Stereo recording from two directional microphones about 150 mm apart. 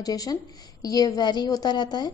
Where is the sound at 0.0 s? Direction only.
25° left (ahead or behind).